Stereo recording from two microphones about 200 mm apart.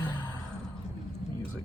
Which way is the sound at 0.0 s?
20° left (ahead or behind).